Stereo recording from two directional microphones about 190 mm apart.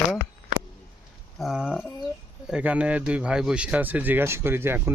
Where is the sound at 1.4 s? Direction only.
Centre (ahead or behind).